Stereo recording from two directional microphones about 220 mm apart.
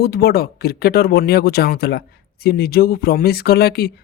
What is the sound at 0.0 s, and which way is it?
Speech, 45° left (ahead or behind).